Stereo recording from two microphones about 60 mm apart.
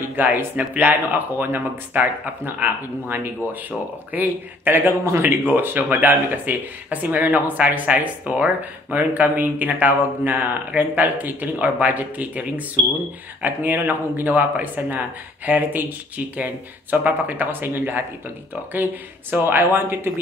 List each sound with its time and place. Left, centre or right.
0.1 s speech: right
5.5 s speech: right